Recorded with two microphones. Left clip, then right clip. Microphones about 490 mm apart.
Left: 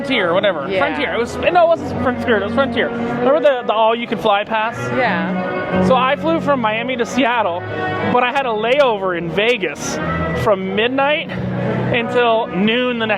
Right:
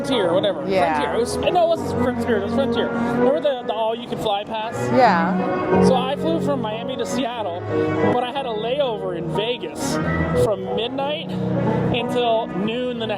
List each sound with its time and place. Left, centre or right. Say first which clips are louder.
0.1 s speech: left 4 dB; centre
1.5 s speech: left 6 dB; left
1.7 s speech: left 4 dB; centre
4.9 s speech: right 3 dB; right
5.8 s speech: left 4 dB; left
8.4 s speech: left 7 dB; left
10.5 s speech: left 7 dB; left
12.6 s speech: left 8 dB; left